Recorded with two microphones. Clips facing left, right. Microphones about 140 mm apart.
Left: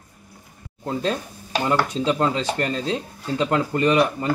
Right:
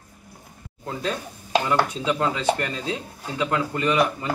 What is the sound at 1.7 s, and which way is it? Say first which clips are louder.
Speech: left 2 dB; 35° left (ahead or behind).